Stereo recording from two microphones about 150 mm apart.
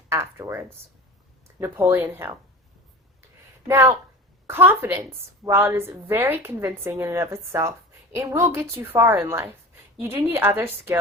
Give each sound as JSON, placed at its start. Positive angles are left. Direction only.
{"t": 0.1, "sound": "speech", "side_deg": -20}
{"t": 3.7, "sound": "a woman's voice", "side_deg": -20}